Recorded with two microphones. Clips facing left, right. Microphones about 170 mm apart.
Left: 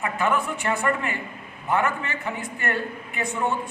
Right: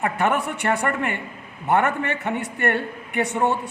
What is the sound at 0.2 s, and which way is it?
Speech, 70° right (ahead or behind).